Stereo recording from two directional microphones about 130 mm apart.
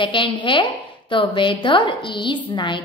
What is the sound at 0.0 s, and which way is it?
A woman's voice, 40° left (ahead or behind).